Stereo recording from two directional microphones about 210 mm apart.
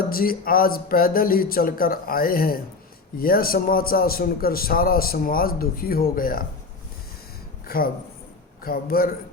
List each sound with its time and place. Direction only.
0.1 s a man's voice: 45° left (ahead or behind)
8.6 s a man's voice: 45° left (ahead or behind)